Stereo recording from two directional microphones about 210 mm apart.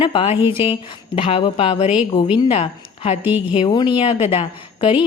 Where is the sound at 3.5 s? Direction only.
20° left (ahead or behind).